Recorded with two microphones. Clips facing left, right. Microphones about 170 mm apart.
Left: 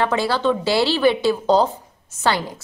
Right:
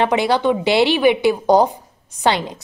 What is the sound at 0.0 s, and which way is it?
A woman's voice, 20° right (ahead or behind).